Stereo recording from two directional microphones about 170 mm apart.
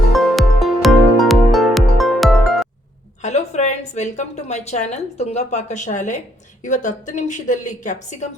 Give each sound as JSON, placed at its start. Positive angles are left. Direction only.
{"t": 0.1, "sound": "music", "side_deg": 0}
{"t": 3.2, "sound": "a woman's voice", "side_deg": 40}